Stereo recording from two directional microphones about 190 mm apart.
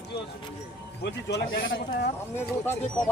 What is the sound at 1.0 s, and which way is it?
Speech, 65° left (ahead or behind).